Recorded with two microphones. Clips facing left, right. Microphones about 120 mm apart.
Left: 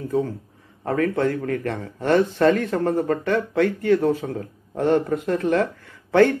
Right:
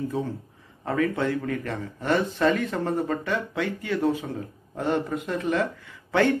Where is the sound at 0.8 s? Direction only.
45° left (ahead or behind).